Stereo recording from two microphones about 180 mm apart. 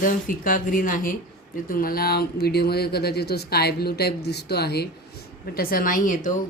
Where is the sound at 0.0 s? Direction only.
50° left (ahead or behind).